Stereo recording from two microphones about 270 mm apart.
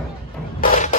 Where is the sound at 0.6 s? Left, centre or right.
Left.